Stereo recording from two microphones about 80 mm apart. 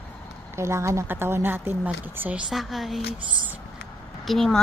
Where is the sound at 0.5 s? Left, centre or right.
Right.